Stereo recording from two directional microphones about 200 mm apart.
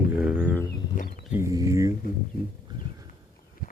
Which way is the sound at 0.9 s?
40° left (ahead or behind).